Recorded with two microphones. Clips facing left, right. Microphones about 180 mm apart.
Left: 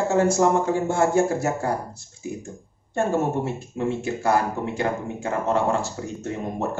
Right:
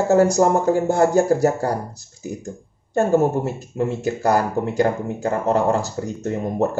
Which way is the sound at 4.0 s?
40° right (ahead or behind).